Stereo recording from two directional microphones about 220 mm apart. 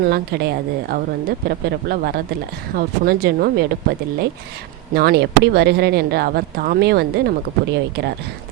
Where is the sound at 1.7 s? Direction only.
45° right (ahead or behind).